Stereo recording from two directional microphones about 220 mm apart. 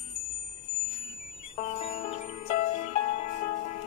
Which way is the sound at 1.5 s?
25° left (ahead or behind).